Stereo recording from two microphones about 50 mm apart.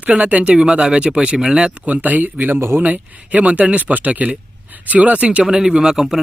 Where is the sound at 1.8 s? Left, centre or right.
Right.